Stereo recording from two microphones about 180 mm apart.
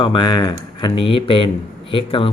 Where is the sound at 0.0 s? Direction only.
25° left (ahead or behind).